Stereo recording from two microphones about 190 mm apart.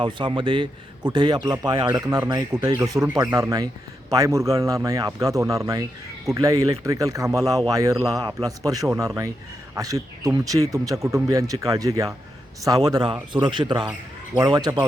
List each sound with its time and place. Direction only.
0.0 s a man's voice: 25° right (ahead or behind)